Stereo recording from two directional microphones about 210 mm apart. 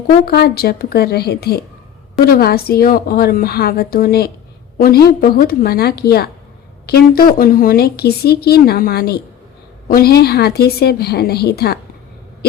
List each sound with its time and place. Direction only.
0.3 s speech: 50° left (ahead or behind)